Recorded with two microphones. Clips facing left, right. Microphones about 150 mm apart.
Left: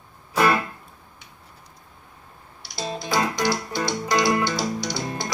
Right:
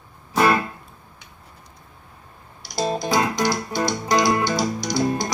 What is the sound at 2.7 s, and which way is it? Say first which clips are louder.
Music: right 5 dB; 45° right (ahead or behind).